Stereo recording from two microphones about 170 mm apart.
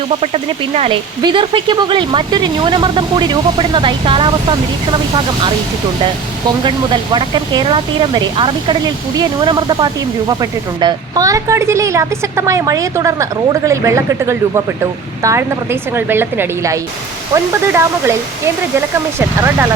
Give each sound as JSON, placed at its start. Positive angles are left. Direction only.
{"t": 0.7, "sound": "speech", "side_deg": -40}
{"t": 6.7, "sound": "a woman's voice", "side_deg": -25}